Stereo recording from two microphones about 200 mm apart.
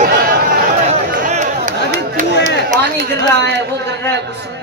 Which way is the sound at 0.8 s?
35° right (ahead or behind).